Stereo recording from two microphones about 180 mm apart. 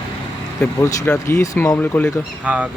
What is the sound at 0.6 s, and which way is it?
Speech, 15° left (ahead or behind).